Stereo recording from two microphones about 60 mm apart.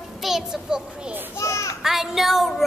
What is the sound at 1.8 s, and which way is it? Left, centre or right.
Child singing, centre.